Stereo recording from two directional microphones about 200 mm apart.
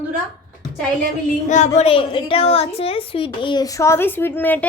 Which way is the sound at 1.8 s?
25° left (ahead or behind).